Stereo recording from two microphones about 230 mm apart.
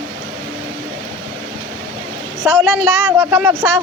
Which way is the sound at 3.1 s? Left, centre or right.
Centre.